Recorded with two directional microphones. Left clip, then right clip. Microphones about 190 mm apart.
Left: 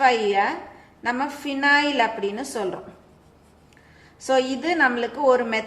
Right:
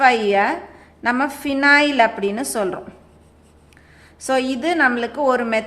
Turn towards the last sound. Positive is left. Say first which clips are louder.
# right 1 dB
turn(degrees=-25)  # may be behind; listen again after turning